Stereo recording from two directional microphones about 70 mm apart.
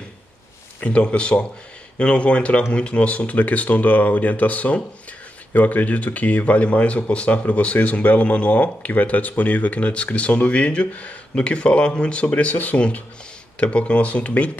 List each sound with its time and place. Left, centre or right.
0.7 s speech: centre